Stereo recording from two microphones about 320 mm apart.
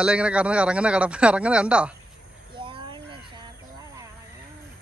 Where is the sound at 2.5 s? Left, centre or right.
Centre.